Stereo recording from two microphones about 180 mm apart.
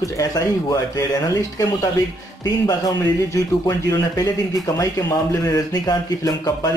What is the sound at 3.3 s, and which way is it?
Speech, 20° left (ahead or behind).